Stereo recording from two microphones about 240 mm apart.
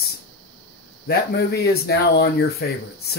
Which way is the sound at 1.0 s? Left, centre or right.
Left.